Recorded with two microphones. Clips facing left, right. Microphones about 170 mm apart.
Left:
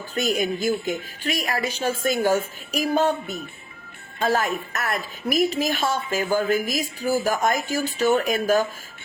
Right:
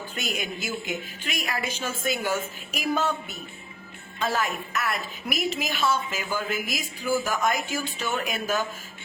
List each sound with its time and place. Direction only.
0.1 s a woman's voice: 40° left (ahead or behind)